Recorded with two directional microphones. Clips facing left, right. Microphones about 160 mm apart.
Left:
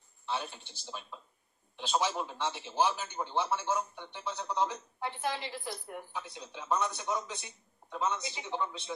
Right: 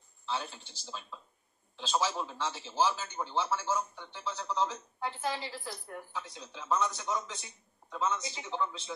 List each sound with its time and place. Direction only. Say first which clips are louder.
0.2 s speech: even; 15° left (ahead or behind)